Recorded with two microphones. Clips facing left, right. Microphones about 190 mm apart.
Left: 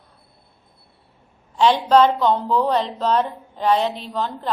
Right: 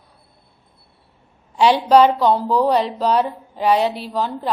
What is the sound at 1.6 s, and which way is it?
A woman's voice, 10° right (ahead or behind).